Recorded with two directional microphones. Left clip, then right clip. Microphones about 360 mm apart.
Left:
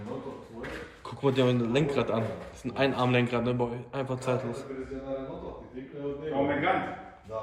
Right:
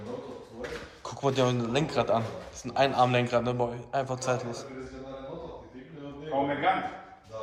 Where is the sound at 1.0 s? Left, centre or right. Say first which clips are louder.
Even; centre.